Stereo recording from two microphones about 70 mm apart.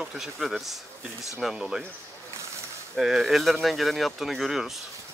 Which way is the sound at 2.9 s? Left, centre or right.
Centre.